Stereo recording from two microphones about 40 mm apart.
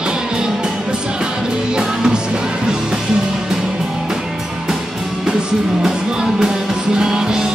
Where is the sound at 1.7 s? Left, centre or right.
Centre.